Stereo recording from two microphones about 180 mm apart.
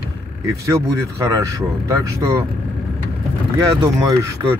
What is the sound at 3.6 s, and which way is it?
Speech, 15° right (ahead or behind).